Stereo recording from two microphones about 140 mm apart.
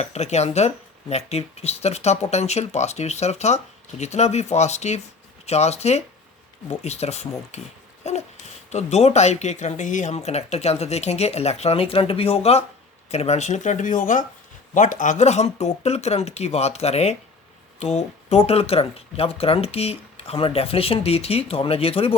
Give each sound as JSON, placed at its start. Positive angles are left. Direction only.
{"t": 0.0, "sound": "speech", "side_deg": 50}
{"t": 8.0, "sound": "a sound", "side_deg": 55}
{"t": 8.7, "sound": "speech", "side_deg": 50}